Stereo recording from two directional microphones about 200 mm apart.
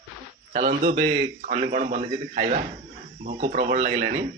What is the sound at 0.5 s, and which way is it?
A man's voice, 40° right (ahead or behind).